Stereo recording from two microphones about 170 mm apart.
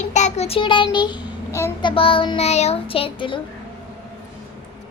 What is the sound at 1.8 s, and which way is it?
A child's voice, 30° left (ahead or behind).